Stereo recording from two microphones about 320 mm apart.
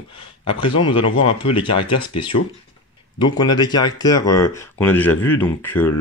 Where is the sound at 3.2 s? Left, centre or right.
Centre.